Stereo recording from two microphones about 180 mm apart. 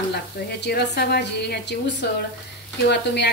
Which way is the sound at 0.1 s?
65° left (ahead or behind).